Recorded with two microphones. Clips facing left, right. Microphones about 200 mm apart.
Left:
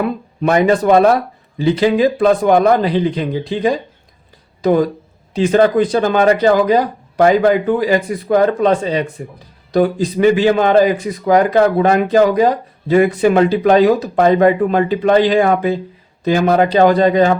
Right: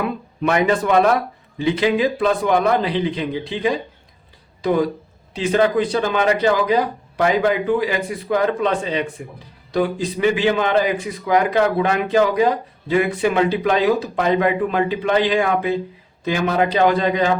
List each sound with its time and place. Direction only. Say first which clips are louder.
0.4 s a man's voice: left 5 dB; 35° left (ahead or behind)